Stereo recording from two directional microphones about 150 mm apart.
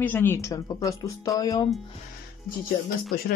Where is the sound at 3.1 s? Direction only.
90° left.